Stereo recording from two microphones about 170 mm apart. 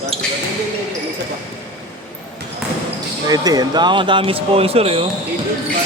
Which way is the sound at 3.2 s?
20° right (ahead or behind).